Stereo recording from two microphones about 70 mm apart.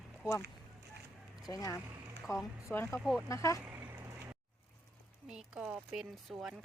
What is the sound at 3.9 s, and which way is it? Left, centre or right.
Vehicle, right.